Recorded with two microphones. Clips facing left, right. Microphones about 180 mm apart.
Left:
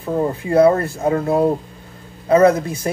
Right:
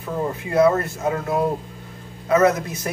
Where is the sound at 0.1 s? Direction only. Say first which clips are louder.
Left 6 dB; 30° left (ahead or behind).